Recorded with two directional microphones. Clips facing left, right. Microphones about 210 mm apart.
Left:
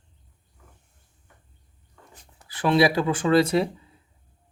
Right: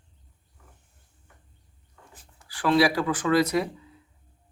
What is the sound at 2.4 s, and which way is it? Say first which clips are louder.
Speech: left 1 dB; 20° left (ahead or behind).